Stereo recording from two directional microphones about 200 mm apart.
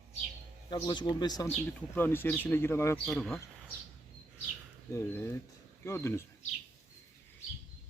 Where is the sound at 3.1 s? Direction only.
Centre (ahead or behind).